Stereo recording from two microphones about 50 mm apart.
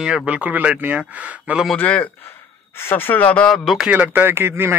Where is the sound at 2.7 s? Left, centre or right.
Left.